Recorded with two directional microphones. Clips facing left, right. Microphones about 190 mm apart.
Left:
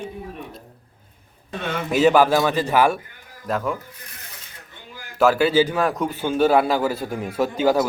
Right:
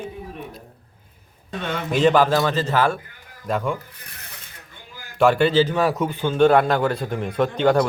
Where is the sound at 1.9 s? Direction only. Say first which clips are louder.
Left 1 dB; 5° left (ahead or behind).